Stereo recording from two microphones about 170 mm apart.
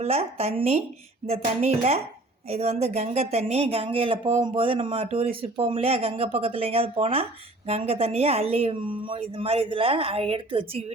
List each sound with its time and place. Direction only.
0.0 s speech: 35° right (ahead or behind)
2.5 s speech: 40° right (ahead or behind)